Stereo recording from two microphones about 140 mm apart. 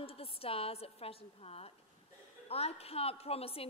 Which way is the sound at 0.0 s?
45° left (ahead or behind).